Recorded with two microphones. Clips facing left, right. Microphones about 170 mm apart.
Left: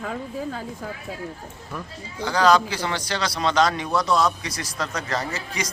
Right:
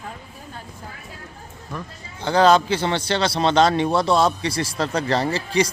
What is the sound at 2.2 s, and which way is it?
A man's voice, 25° right (ahead or behind).